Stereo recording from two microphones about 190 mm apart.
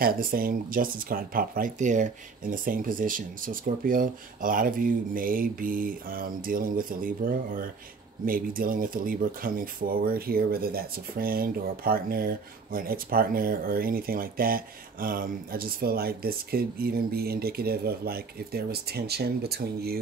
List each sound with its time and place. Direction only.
0.0 s speech: 50° right (ahead or behind)